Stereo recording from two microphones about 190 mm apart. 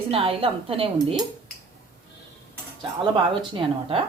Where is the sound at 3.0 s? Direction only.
25° right (ahead or behind).